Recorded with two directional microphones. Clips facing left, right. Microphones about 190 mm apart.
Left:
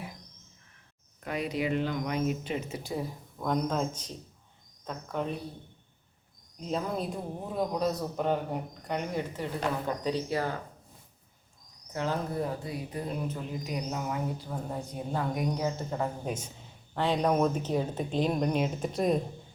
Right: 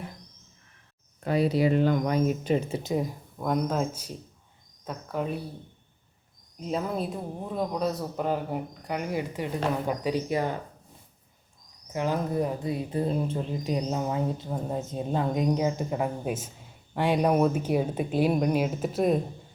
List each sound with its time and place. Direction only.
1.2 s a man's voice: 35° right (ahead or behind); by 5.4 s 5° right (ahead or behind)
6.6 s a man's voice: centre (ahead or behind); by 10.5 s 15° right (ahead or behind)
11.9 s speech: 15° right (ahead or behind)